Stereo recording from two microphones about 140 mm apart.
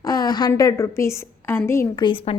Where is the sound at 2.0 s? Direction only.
40° left (ahead or behind).